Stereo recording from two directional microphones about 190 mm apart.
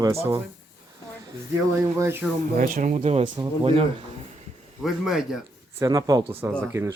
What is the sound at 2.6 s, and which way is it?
Speech, 45° right (ahead or behind).